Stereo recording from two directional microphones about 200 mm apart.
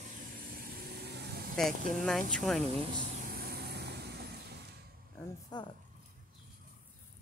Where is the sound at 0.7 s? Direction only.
50° right (ahead or behind).